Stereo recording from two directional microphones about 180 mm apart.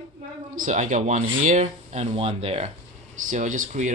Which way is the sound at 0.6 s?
45° right (ahead or behind).